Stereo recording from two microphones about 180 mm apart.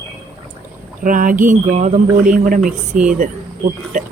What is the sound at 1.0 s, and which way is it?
Speech, 50° right (ahead or behind).